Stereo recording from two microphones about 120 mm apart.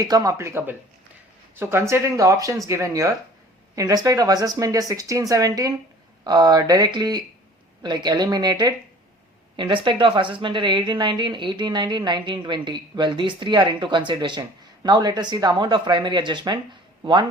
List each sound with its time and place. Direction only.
0.0 s speech: 30° right (ahead or behind)
1.9 s speech: 25° right (ahead or behind)